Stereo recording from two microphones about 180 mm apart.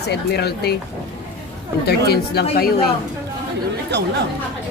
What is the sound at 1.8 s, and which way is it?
Speech, 60° left (ahead or behind).